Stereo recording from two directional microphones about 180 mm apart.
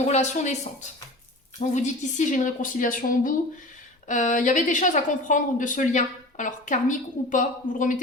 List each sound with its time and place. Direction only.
0.1 s speech: 40° left (ahead or behind)